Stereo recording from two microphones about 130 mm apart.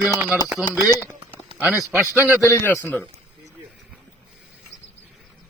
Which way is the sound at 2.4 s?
20° left (ahead or behind).